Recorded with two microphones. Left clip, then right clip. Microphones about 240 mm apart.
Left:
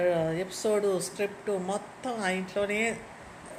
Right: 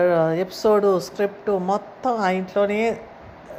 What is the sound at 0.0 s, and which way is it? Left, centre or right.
A woman's voice, right.